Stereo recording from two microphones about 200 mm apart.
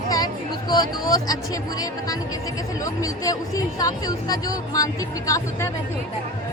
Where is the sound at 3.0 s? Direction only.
15° left (ahead or behind).